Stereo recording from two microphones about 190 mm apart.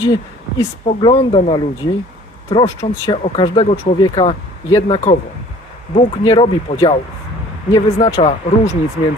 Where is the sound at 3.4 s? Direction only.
25° left (ahead or behind).